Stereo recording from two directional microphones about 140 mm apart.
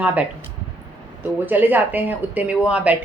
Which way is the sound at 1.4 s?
15° right (ahead or behind).